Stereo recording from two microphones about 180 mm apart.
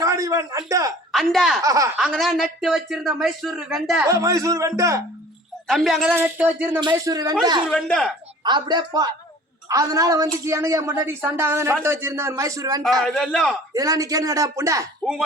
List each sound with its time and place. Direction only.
0.0 s a sound: 20° right (ahead or behind)
1.1 s speech: centre (ahead or behind)
1.6 s speech: 20° right (ahead or behind)
2.0 s speech: centre (ahead or behind)
4.0 s a woman's voice: 20° right (ahead or behind)
5.6 s a woman's voice: centre (ahead or behind)
6.7 s speech: 20° right (ahead or behind)
7.7 s speech: 5° left (ahead or behind)
8.4 s a woman's voice: 25° right (ahead or behind)
13.0 s speech: centre (ahead or behind)
13.7 s speech: 20° right (ahead or behind)